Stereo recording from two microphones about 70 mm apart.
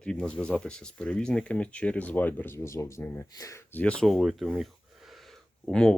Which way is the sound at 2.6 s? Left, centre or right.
Left.